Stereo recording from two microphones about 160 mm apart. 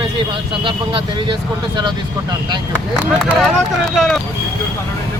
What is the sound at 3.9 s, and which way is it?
Speech, centre (ahead or behind).